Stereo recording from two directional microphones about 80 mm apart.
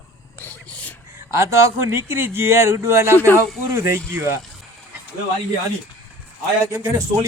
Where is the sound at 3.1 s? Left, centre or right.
Left.